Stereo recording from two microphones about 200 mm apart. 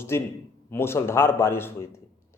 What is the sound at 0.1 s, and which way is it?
Speech, 15° left (ahead or behind).